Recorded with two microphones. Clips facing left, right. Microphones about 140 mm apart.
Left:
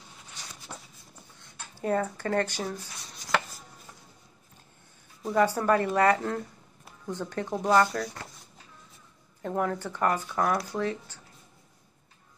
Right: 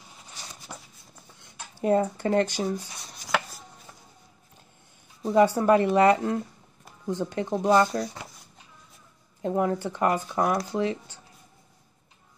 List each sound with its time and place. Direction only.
0.7 s a sound: 10° right (ahead or behind)
1.6 s speech: 15° right (ahead or behind)
3.3 s chopping: 5° right (ahead or behind)
5.2 s speech: 20° right (ahead or behind)
9.4 s speech: 15° right (ahead or behind)